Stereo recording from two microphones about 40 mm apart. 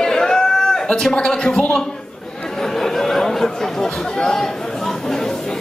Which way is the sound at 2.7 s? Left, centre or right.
Centre.